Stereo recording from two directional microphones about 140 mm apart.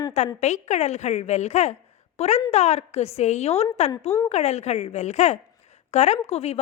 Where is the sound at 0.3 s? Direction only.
55° left (ahead or behind).